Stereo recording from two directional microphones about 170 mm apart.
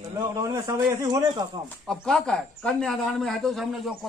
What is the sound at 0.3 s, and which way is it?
Speech, 20° right (ahead or behind).